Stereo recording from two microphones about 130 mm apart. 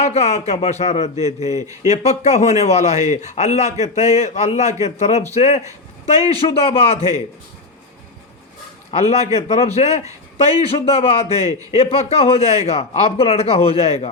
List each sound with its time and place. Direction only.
0.0 s a man's voice: 60° left (ahead or behind)
1.5 s speech: 25° right (ahead or behind)
1.9 s a man's voice: 60° left (ahead or behind)
8.9 s a man's voice: 60° left (ahead or behind)